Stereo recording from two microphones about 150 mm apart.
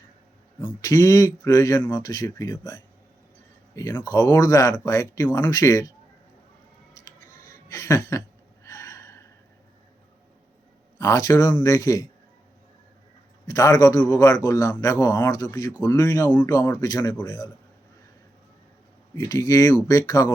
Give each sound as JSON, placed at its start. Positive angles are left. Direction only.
{"t": 0.8, "sound": "a man's voice", "side_deg": 25}
{"t": 7.7, "sound": "a sound", "side_deg": 20}
{"t": 8.6, "sound": "gasp", "side_deg": 20}
{"t": 10.9, "sound": "a man's voice", "side_deg": 20}
{"t": 13.5, "sound": "a man's voice", "side_deg": 25}
{"t": 19.2, "sound": "a man's voice", "side_deg": 20}